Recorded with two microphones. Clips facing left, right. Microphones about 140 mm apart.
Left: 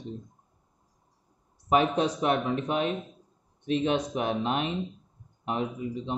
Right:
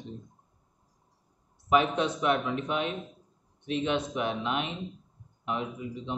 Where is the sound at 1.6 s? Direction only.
35° left (ahead or behind).